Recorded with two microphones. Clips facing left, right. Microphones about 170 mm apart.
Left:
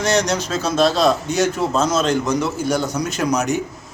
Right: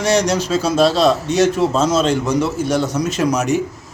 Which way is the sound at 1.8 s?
30° right (ahead or behind).